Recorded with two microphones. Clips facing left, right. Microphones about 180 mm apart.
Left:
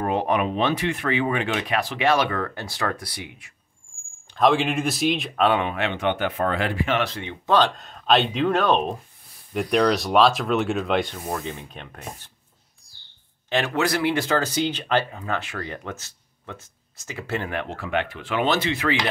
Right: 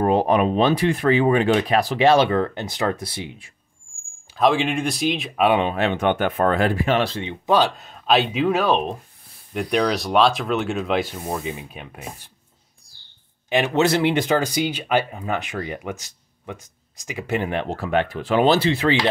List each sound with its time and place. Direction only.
0.0 s speech: 35° right (ahead or behind)
4.4 s speech: centre (ahead or behind)
5.6 s speech: 30° right (ahead or behind)
5.9 s speech: 45° right (ahead or behind); by 7.3 s 25° right (ahead or behind)
7.4 s speech: 10° right (ahead or behind)
13.7 s speech: 25° right (ahead or behind)
17.6 s speech: 40° right (ahead or behind)